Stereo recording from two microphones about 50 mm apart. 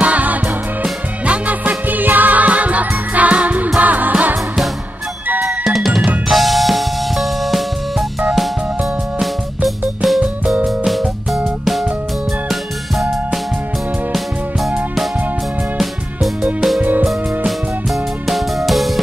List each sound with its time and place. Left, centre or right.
0.0 s music: right
5.4 s drum: centre
6.2 s music: centre
9.2 s music: centre
10.2 s music: centre
14.1 s music: centre
18.7 s music: centre